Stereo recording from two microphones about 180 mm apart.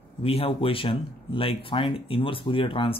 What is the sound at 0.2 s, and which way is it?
Speech, 30° left (ahead or behind).